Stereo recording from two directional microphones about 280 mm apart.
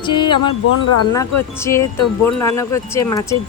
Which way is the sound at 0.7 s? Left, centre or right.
Left.